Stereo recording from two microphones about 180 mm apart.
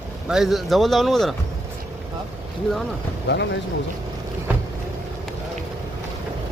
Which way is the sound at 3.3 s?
80° left.